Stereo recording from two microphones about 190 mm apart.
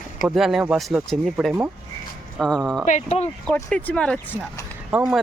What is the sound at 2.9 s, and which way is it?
Speech, 40° left (ahead or behind).